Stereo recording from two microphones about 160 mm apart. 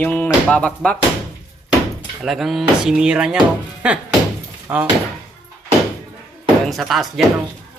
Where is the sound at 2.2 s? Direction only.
Centre (ahead or behind); by 4.8 s 15° right (ahead or behind).